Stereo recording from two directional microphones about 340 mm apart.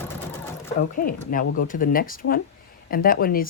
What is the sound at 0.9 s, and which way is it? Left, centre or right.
Speech, left.